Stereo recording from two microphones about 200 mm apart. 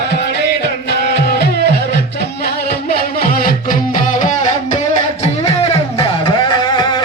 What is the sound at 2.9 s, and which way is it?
Music, 45° left (ahead or behind).